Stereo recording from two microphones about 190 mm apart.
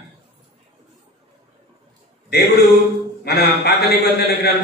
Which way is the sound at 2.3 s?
60° left (ahead or behind).